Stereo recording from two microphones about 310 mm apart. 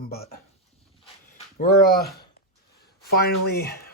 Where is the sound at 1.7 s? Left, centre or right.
Left.